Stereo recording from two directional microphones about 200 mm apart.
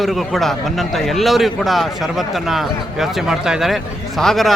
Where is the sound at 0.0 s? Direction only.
Centre (ahead or behind).